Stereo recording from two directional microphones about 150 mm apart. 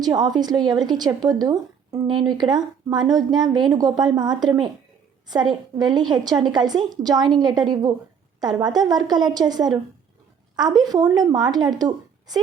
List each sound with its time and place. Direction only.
0.0 s a woman's voice: 25° right (ahead or behind)